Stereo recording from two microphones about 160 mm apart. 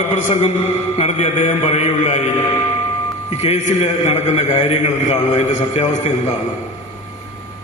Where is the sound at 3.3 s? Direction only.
40° left (ahead or behind).